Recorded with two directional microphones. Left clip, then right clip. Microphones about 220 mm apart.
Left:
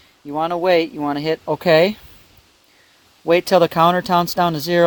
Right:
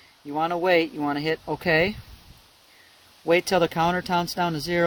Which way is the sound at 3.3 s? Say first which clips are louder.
Left 7 dB; 30° left (ahead or behind).